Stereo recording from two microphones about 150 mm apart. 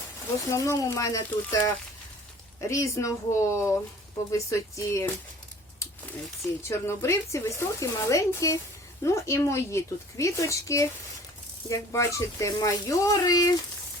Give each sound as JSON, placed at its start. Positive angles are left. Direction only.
{"t": 0.5, "sound": "speech", "side_deg": 20}
{"t": 6.6, "sound": "speech", "side_deg": 15}